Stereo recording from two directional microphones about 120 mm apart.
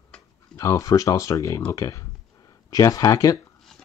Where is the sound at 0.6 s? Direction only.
30° left (ahead or behind).